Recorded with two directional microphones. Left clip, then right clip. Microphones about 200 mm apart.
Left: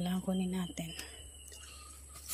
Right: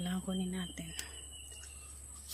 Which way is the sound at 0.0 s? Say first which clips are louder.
Left 3 dB; 15° left (ahead or behind).